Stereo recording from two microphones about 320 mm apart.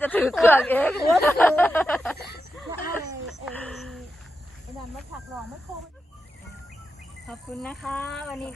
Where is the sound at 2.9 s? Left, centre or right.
Centre.